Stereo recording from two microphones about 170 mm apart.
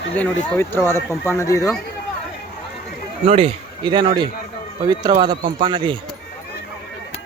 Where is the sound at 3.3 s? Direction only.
30° right (ahead or behind).